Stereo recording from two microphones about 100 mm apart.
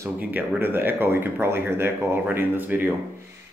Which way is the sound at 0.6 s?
20° right (ahead or behind).